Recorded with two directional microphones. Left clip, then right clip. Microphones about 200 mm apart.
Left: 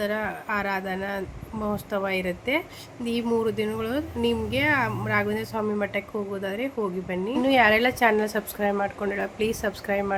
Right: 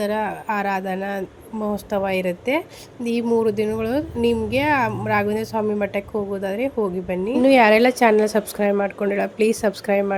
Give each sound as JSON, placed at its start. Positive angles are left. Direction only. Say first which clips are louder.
{"t": 0.0, "sound": "speech", "louder": "right 5 dB", "side_deg": -20}